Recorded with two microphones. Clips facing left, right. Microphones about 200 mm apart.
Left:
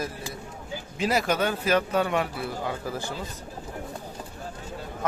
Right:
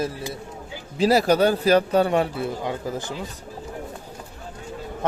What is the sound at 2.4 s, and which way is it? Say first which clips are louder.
Speech: right 4 dB; 20° right (ahead or behind).